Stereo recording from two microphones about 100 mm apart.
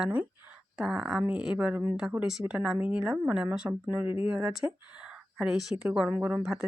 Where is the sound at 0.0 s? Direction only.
15° right (ahead or behind).